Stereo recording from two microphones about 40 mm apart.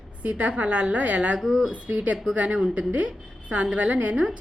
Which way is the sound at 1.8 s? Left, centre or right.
Right.